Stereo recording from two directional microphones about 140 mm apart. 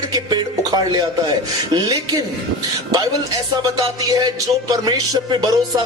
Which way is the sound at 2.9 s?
25° right (ahead or behind).